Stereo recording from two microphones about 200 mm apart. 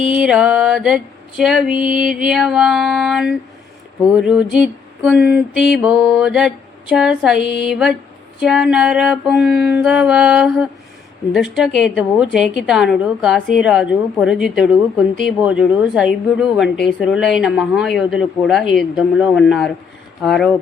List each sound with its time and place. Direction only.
0.1 s a woman's voice: 5° right (ahead or behind)
5.0 s a woman's voice: 5° right (ahead or behind)